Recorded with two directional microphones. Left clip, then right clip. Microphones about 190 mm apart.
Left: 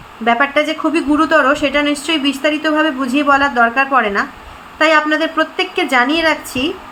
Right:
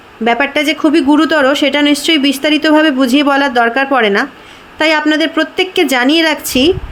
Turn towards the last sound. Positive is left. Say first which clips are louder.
# right 4 dB
turn(degrees=-45)  # may be behind; listen again after turning